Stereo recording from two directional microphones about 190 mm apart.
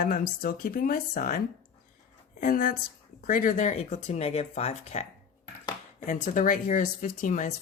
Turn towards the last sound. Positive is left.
turn(degrees=45)  # may be behind; listen again after turning